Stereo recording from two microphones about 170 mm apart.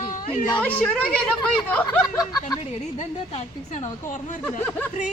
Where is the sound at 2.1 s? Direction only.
20° left (ahead or behind).